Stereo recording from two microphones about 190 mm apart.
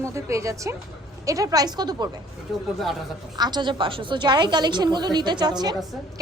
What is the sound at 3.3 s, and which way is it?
A woman's voice, 20° right (ahead or behind).